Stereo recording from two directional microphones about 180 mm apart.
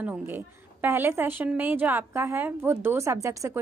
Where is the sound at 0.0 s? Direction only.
10° right (ahead or behind).